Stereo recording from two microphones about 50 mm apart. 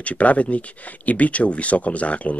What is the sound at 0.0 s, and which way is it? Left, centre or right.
Speech, left.